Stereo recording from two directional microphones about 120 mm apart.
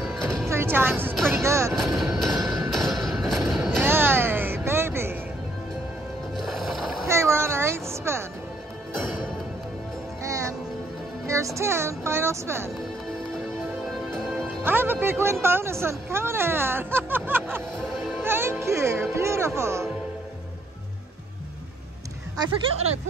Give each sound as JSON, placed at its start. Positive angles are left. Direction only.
{"t": 0.5, "sound": "music", "side_deg": -20}
{"t": 1.8, "sound": "vehicle", "side_deg": 0}
{"t": 2.3, "sound": "music", "side_deg": -25}
{"t": 2.7, "sound": "music", "side_deg": 0}
{"t": 3.8, "sound": "music", "side_deg": -20}
{"t": 6.3, "sound": "music", "side_deg": 0}
{"t": 7.1, "sound": "music", "side_deg": -20}
{"t": 10.2, "sound": "music", "side_deg": -25}
{"t": 11.2, "sound": "speech", "side_deg": -25}
{"t": 14.1, "sound": "music", "side_deg": 0}
{"t": 14.6, "sound": "speech", "side_deg": -15}
{"t": 17.7, "sound": "music", "side_deg": 0}
{"t": 18.2, "sound": "music", "side_deg": -20}
{"t": 19.1, "sound": "speech", "side_deg": -20}